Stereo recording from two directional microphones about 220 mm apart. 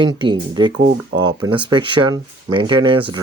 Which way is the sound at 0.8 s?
50° right (ahead or behind).